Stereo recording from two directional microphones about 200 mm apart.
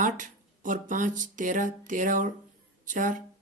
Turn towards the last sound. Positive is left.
turn(degrees=-40)  # may be behind; listen again after turning